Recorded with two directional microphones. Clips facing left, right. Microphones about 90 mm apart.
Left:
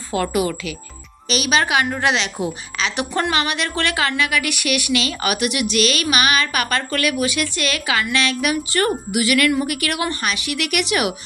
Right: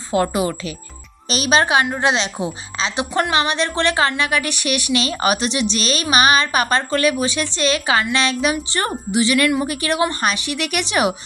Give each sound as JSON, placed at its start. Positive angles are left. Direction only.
{"t": 0.1, "sound": "a woman's voice", "side_deg": -25}